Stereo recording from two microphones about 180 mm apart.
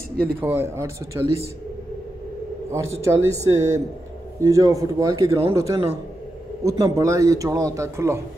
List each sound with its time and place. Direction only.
0.4 s a man's voice: 10° right (ahead or behind)
2.7 s a man's voice: 15° right (ahead or behind)